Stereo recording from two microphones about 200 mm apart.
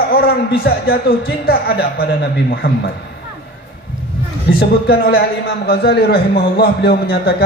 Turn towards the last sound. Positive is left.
turn(degrees=50)  # may be behind; listen again after turning